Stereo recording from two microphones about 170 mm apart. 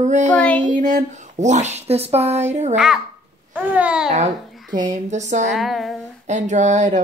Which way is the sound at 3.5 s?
10° right (ahead or behind).